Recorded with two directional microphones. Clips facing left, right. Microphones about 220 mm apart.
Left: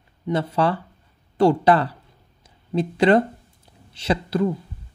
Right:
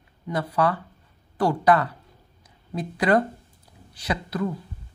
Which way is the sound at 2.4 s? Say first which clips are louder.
Left 8 dB; 25° left (ahead or behind).